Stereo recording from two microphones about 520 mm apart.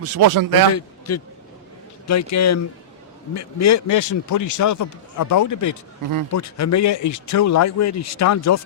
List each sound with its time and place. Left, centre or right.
0.0 s speech: right
0.7 s a man's voice: left